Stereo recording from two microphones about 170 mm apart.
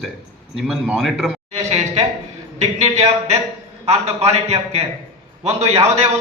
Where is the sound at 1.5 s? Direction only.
35° right (ahead or behind).